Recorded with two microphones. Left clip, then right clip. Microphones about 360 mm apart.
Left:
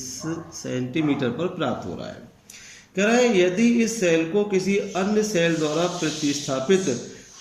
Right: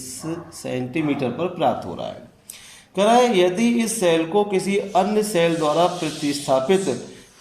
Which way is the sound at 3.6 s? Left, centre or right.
Centre.